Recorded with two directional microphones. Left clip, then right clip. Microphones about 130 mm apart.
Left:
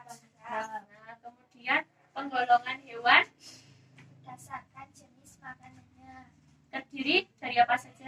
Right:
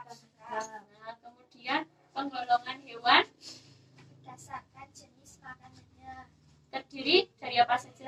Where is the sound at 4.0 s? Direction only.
35° right (ahead or behind).